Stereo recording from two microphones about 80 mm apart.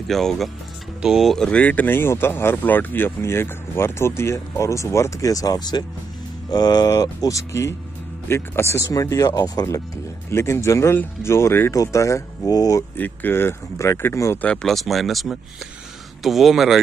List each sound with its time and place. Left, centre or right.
0.1 s speech: centre
1.6 s speech: left
8.3 s speech: left
10.3 s speech: left
11.7 s speech: left
12.9 s speech: left
14.4 s speech: centre
14.7 s speech: centre